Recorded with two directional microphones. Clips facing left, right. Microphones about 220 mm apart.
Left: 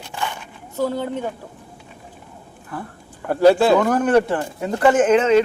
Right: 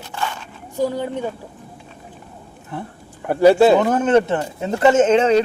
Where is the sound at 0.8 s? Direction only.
10° right (ahead or behind).